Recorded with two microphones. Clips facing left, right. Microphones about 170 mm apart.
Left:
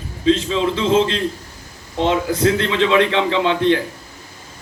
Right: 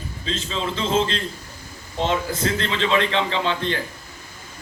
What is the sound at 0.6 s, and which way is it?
Speech, 60° left (ahead or behind).